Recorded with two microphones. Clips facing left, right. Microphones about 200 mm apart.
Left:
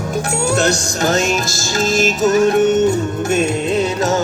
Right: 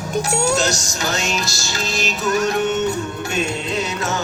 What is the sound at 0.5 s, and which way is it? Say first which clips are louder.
Music: left 4 dB; 60° left (ahead or behind).